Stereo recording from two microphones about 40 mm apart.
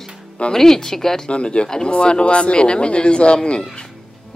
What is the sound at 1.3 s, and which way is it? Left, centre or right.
Speech, left.